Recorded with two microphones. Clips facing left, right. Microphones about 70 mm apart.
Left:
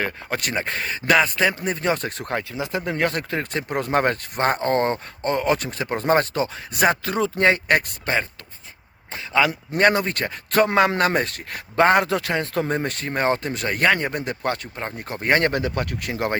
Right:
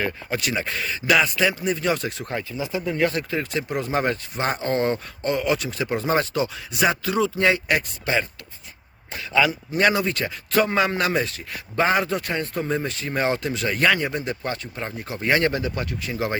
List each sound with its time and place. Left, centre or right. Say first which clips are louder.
0.0 s a man's voice: even; left
2.4 s speech: even; left
9.5 s speech: left 2 dB; left
13.1 s a man's voice: left 1 dB; left
14.2 s speech: left 2 dB; left